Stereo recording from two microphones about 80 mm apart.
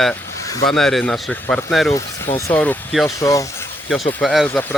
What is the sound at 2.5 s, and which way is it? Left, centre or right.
Speech, left.